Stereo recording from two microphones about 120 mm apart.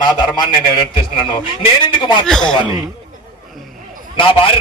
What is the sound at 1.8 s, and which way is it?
Speech, 40° left (ahead or behind).